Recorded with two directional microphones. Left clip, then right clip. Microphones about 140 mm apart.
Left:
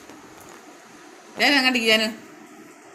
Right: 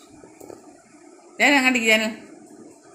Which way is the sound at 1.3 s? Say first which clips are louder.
Right 1 dB; 15° right (ahead or behind).